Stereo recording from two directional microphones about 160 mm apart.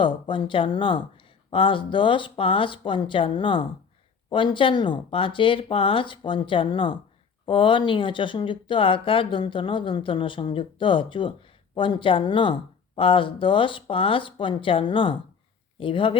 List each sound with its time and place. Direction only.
0.0 s speech: 30° left (ahead or behind)